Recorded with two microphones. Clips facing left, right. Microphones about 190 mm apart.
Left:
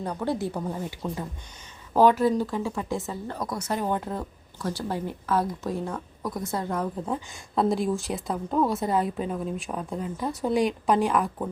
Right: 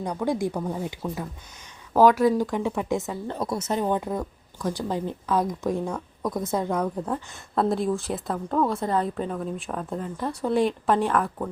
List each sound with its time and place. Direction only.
0.3 s speech: 15° right (ahead or behind)
5.8 s a woman's voice: centre (ahead or behind)